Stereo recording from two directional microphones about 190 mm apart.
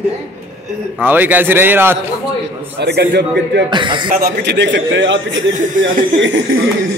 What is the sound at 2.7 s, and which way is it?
Speech, 60° right (ahead or behind).